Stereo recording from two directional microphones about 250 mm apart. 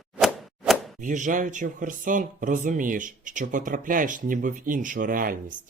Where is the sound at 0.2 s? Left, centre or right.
Centre.